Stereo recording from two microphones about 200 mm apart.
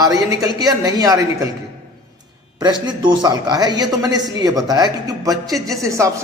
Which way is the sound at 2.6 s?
20° right (ahead or behind).